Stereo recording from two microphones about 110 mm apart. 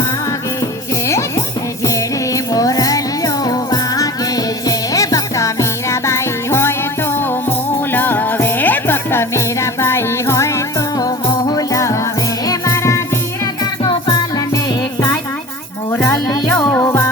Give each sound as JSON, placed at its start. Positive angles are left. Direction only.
{"t": 1.8, "sound": "music", "side_deg": 30}
{"t": 13.4, "sound": "music", "side_deg": 40}
{"t": 15.9, "sound": "music", "side_deg": 20}